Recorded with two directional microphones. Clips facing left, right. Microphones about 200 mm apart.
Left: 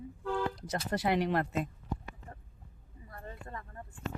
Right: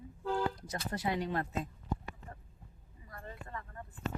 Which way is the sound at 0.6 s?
80° left.